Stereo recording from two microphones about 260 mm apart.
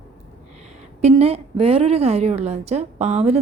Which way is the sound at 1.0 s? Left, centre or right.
Right.